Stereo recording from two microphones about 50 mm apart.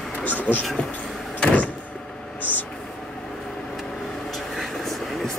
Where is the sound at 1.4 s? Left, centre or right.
Left.